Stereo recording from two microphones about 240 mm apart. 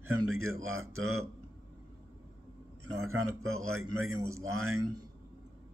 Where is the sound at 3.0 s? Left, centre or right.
Right.